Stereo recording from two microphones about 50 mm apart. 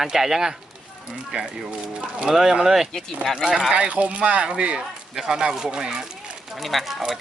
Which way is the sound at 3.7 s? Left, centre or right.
Right.